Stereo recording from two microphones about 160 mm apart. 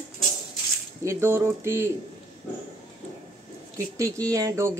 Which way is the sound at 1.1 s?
15° right (ahead or behind).